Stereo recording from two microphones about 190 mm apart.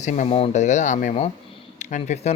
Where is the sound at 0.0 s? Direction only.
40° left (ahead or behind).